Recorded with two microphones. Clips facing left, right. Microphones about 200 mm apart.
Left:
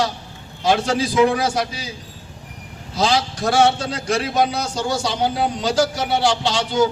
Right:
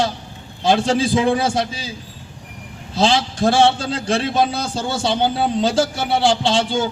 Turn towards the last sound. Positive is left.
turn(degrees=-30)  # may be behind; listen again after turning